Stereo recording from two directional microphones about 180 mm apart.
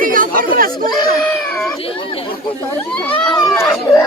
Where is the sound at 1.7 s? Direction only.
30° left (ahead or behind).